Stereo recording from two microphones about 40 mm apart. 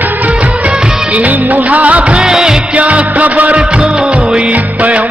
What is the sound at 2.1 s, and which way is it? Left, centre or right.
Music, centre.